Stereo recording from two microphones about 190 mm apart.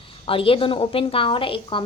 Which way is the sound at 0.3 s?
30° left (ahead or behind).